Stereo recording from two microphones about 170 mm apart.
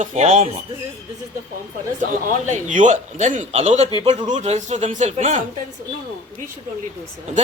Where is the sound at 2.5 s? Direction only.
45° right (ahead or behind).